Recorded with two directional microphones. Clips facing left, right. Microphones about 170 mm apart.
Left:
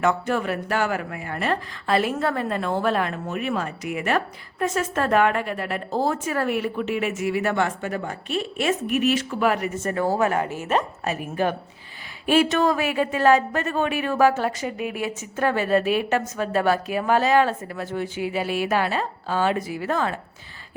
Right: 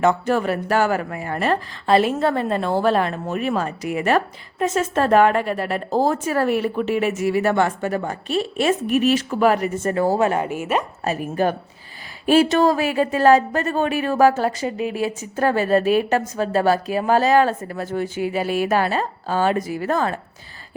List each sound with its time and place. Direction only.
0.0 s speech: 35° right (ahead or behind)
2.0 s speech: 25° right (ahead or behind)
10.2 s speech: 20° right (ahead or behind)
11.0 s speech: 40° right (ahead or behind)